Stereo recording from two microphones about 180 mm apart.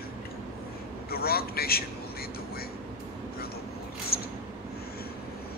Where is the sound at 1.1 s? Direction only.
60° left (ahead or behind).